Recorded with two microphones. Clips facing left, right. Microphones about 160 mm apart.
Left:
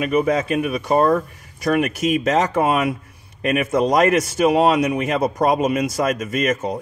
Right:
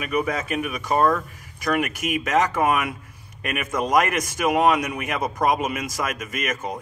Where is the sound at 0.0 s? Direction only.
25° left (ahead or behind).